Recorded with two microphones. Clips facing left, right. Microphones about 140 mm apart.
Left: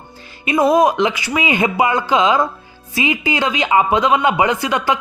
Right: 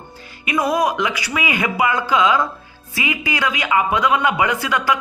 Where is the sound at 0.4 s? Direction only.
25° left (ahead or behind).